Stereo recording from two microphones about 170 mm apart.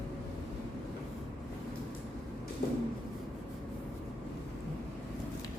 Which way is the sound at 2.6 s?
60° left (ahead or behind).